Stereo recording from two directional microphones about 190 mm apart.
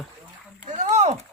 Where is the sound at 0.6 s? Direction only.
40° right (ahead or behind).